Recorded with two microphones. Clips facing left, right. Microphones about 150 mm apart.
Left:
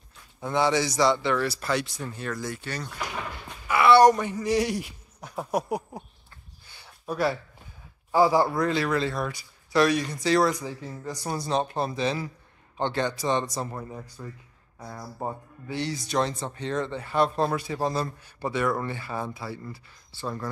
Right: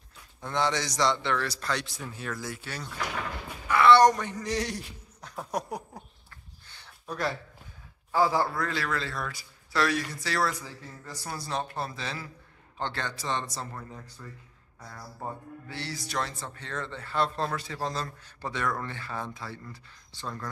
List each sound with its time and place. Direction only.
0.4 s speech: 10° left (ahead or behind)
3.6 s speech: 10° left (ahead or behind)
6.7 s a sound: 10° left (ahead or behind)
8.1 s a man's voice: 15° left (ahead or behind)
15.7 s speech: 20° left (ahead or behind)